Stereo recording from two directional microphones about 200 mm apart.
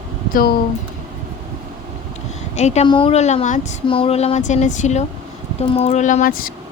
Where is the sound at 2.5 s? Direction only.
35° left (ahead or behind).